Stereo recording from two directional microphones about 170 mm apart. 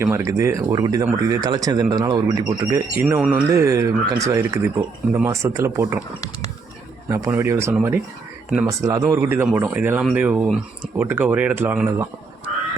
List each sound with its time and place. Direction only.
0.0 s speech: 20° right (ahead or behind)
7.1 s speech: 15° right (ahead or behind)